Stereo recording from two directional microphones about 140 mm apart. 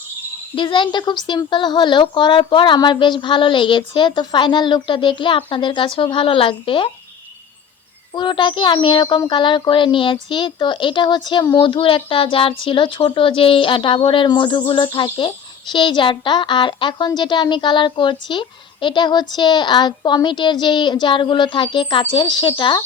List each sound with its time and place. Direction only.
0.5 s a woman's voice: 35° left (ahead or behind)
8.1 s a woman's voice: 35° left (ahead or behind)